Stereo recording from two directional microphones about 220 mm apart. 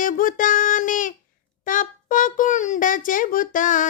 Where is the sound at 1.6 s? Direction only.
35° left (ahead or behind).